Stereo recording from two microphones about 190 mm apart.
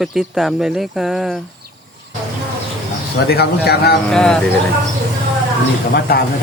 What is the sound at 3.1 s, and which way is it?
Speech, 60° left (ahead or behind).